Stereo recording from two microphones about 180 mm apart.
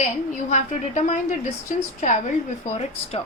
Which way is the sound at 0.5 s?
40° left (ahead or behind).